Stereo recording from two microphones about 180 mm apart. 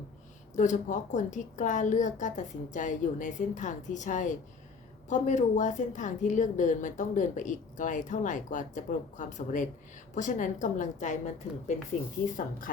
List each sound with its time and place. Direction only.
0.5 s a woman's voice: 45° left (ahead or behind)
12.4 s a woman's voice: 50° left (ahead or behind)